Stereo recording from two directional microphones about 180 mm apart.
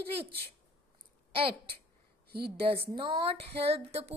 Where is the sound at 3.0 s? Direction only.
30° right (ahead or behind).